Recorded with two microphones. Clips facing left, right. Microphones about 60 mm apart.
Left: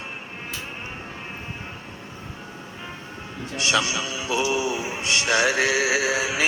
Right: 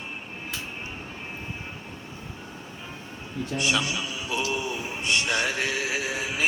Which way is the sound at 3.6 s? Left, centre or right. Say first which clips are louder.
Left 4 dB; left.